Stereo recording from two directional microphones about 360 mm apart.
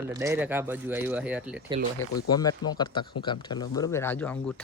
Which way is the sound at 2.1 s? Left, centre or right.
Centre.